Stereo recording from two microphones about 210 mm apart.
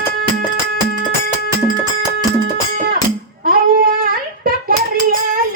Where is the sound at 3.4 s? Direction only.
40° right (ahead or behind).